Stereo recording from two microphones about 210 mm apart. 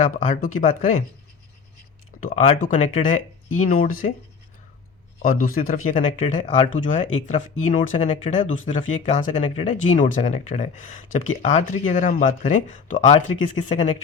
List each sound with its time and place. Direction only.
0.0 s speech: 40° left (ahead or behind)
2.3 s speech: 35° left (ahead or behind)
5.2 s speech: 40° left (ahead or behind); by 13.8 s 25° left (ahead or behind)